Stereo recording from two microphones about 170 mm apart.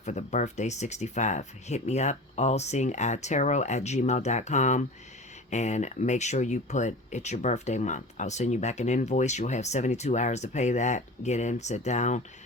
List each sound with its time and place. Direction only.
0.0 s speech: 45° left (ahead or behind)